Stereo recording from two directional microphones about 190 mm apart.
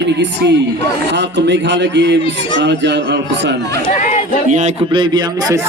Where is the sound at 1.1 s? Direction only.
65° right (ahead or behind).